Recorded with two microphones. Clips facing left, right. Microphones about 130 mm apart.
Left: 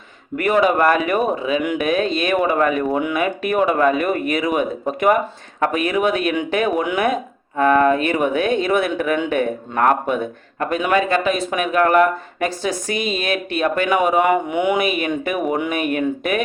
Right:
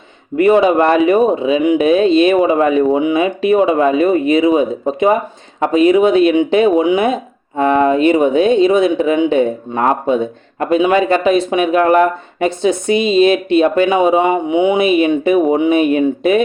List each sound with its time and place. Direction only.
0.3 s speech: 25° right (ahead or behind)